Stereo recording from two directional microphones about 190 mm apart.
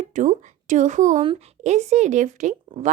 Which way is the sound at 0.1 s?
40° right (ahead or behind).